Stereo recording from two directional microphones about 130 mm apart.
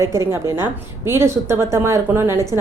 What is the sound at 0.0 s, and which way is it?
A woman's voice, 20° right (ahead or behind).